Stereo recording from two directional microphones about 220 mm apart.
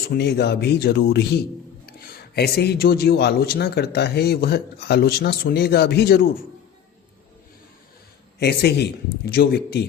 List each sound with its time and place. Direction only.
0.1 s speech: 50° left (ahead or behind)
8.4 s speech: 45° left (ahead or behind)